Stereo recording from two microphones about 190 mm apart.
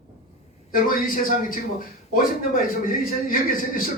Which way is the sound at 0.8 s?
45° left (ahead or behind).